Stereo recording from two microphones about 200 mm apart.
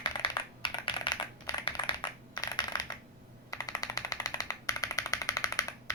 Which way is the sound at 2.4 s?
20° left (ahead or behind).